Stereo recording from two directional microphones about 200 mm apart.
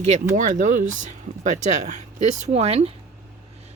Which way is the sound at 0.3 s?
40° right (ahead or behind).